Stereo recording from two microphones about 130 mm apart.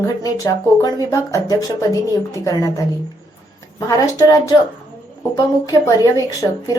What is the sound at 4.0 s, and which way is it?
Speech, 25° left (ahead or behind).